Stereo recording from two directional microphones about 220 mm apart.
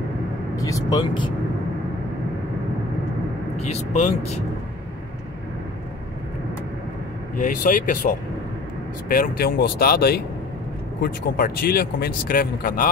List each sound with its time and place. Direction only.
0.6 s speech: 15° left (ahead or behind)
3.5 s speech: 30° left (ahead or behind)
7.3 s speech: 35° left (ahead or behind)